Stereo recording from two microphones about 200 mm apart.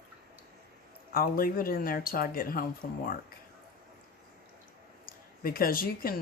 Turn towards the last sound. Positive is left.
turn(degrees=45)  # may be behind; listen again after turning